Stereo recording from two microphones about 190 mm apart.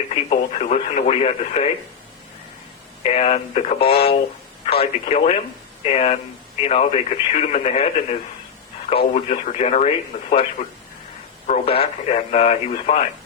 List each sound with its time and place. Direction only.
0.1 s speech: 35° left (ahead or behind)
3.0 s speech: 35° left (ahead or behind)
11.4 s speech: 35° left (ahead or behind)